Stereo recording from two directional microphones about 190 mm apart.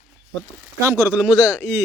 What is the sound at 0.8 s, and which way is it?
Speech, 15° right (ahead or behind).